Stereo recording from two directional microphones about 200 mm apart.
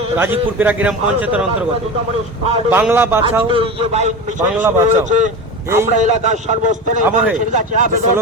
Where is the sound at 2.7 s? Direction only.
10° right (ahead or behind).